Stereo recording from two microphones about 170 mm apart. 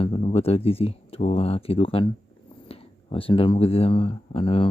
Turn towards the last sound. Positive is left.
turn(degrees=30)  # may be behind; listen again after turning